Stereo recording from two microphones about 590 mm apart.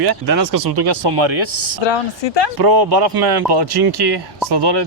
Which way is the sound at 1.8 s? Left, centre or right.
Left.